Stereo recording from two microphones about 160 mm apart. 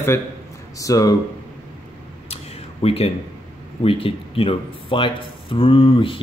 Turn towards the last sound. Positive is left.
turn(degrees=35)  # may be behind; listen again after turning